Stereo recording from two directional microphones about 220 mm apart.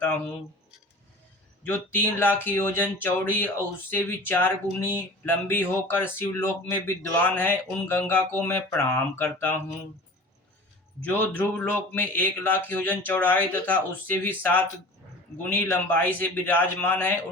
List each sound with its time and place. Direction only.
0.0 s speech: 5° left (ahead or behind)
1.6 s speech: 10° left (ahead or behind)
11.0 s speech: 10° left (ahead or behind)